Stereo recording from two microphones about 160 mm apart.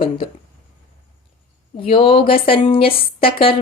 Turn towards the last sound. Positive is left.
turn(degrees=35)  # may be behind; listen again after turning